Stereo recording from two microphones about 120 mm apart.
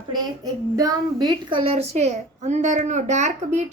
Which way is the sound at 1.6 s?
60° right (ahead or behind).